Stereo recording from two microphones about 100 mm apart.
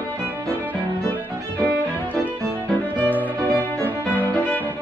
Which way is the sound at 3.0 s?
15° right (ahead or behind).